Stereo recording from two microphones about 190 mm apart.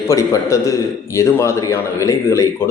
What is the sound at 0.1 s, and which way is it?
A man's voice, 15° left (ahead or behind).